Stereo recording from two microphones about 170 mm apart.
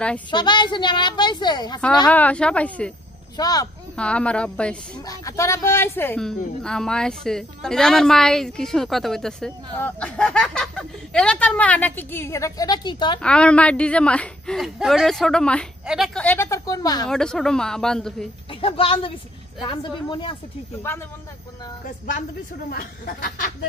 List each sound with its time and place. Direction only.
0.3 s a woman's voice: 25° left (ahead or behind)
2.0 s speech: 10° left (ahead or behind)
3.3 s a woman's voice: 25° left (ahead or behind)
3.9 s speech: 5° left (ahead or behind)
5.0 s speech: 20° left (ahead or behind)
13.2 s a woman's voice: 5° left (ahead or behind)
16.3 s a woman's voice: 15° left (ahead or behind)
17.1 s speech: 5° left (ahead or behind)
18.5 s a woman's voice: 30° left (ahead or behind)
20.9 s speech: 10° left (ahead or behind)
21.8 s a woman's voice: 50° left (ahead or behind)